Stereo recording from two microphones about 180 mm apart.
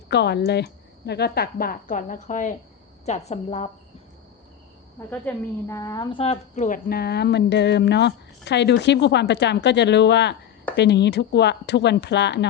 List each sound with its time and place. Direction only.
0.1 s a woman's voice: 70° left (ahead or behind); by 3.7 s 35° left (ahead or behind)
5.2 s speech: 15° left (ahead or behind); by 12.5 s 70° left (ahead or behind)